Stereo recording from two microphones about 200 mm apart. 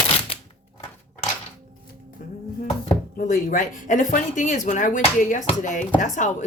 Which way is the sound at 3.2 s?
40° left (ahead or behind).